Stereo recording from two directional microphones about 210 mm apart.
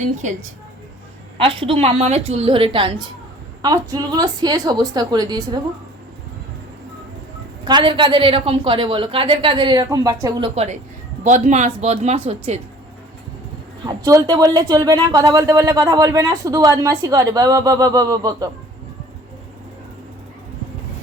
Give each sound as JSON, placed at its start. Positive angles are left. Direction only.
{"t": 1.4, "sound": "a woman's voice", "side_deg": -25}
{"t": 7.7, "sound": "a woman's voice", "side_deg": -25}
{"t": 10.5, "sound": "speech", "side_deg": -30}
{"t": 13.8, "sound": "speech", "side_deg": -15}